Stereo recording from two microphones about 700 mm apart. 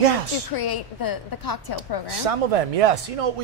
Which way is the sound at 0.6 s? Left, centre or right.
Left.